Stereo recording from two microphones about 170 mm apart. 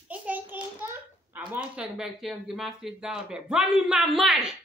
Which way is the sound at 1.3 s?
10° right (ahead or behind).